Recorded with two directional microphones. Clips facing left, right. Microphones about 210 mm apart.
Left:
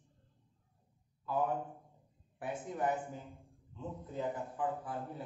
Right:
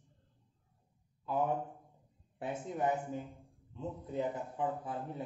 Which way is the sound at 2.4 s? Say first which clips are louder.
Right 1 dB; 20° right (ahead or behind).